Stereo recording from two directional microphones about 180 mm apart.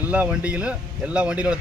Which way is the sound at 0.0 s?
10° right (ahead or behind).